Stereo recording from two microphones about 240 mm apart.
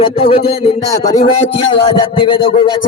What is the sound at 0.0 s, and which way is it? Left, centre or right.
Music, left.